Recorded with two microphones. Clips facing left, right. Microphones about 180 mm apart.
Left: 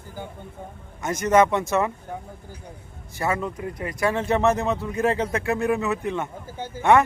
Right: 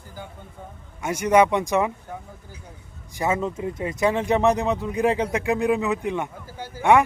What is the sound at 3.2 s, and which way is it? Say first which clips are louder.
Speech: right 2 dB; 20° right (ahead or behind).